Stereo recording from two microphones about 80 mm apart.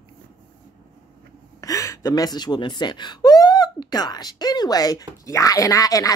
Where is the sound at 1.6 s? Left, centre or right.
Left.